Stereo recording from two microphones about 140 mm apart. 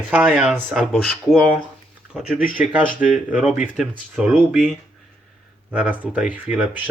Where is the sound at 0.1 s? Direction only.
15° right (ahead or behind).